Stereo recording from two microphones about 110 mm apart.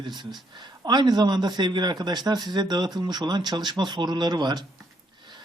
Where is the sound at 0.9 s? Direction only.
40° right (ahead or behind).